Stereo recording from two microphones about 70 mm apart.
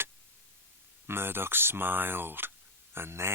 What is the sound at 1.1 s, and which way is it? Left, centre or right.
Speech, right.